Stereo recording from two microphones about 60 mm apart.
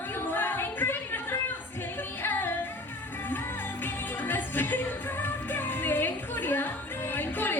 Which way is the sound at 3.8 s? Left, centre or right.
Left.